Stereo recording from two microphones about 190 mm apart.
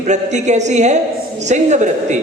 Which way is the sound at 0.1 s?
40° right (ahead or behind).